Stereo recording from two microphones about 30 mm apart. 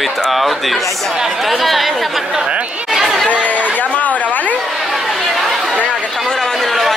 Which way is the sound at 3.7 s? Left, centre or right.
Left.